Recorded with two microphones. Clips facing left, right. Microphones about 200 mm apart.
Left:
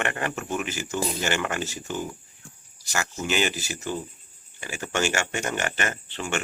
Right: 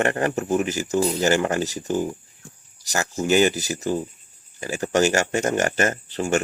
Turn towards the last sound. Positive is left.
turn(degrees=-40)  # may be behind; listen again after turning